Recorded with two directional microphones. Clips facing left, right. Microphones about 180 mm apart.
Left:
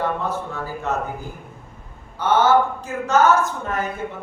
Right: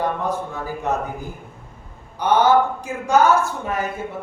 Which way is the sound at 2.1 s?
15° right (ahead or behind).